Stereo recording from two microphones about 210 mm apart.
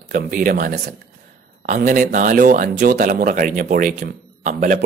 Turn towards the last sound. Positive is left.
turn(degrees=-40)  # may be behind; listen again after turning